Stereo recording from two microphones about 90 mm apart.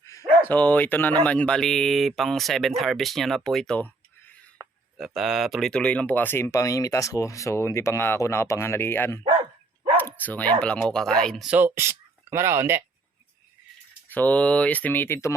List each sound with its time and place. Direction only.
0.4 s speech: 20° left (ahead or behind)
4.9 s speech: centre (ahead or behind)
5.7 s speech: 15° left (ahead or behind)
6.5 s speech: 40° left (ahead or behind)
10.0 s dog: 20° left (ahead or behind)
10.6 s speech: 10° left (ahead or behind)
11.5 s speech: 25° right (ahead or behind)
14.1 s speech: 20° left (ahead or behind)